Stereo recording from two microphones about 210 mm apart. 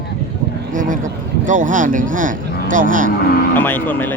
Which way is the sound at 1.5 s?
35° right (ahead or behind).